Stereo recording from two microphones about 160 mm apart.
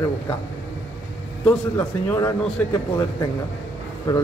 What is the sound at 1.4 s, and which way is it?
Speech, 15° left (ahead or behind).